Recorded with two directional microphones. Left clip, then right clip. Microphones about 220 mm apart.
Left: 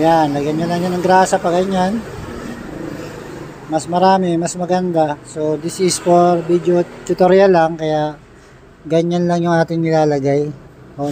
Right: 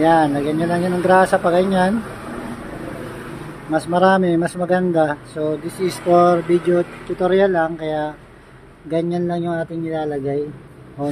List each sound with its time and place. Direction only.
0.0 s speech: 5° left (ahead or behind)
3.7 s speech: centre (ahead or behind)
5.8 s speech: 20° left (ahead or behind)
6.1 s speech: 5° left (ahead or behind)
7.2 s speech: 25° left (ahead or behind)